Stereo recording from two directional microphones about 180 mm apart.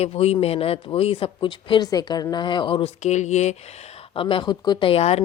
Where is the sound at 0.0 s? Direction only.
35° left (ahead or behind).